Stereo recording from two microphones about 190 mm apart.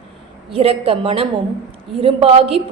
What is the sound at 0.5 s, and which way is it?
A woman's voice, 30° right (ahead or behind).